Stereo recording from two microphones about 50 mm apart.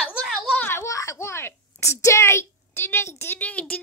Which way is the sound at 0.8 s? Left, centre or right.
Left.